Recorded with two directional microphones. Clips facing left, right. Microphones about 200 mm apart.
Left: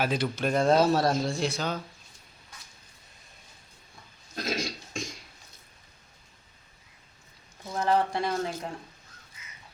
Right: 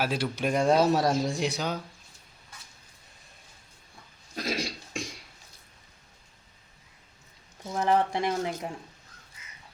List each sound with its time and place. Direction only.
0.0 s speech: 5° right (ahead or behind)
4.4 s burping: 10° right (ahead or behind)
7.7 s speech: 20° right (ahead or behind)